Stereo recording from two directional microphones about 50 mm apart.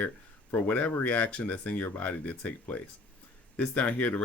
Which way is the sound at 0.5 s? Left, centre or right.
Left.